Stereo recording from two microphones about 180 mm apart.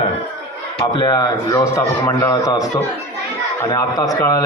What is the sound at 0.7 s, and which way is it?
A man's voice, 25° left (ahead or behind).